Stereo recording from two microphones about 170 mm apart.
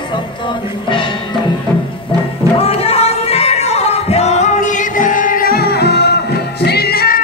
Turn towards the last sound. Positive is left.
turn(degrees=65)  # may be behind; listen again after turning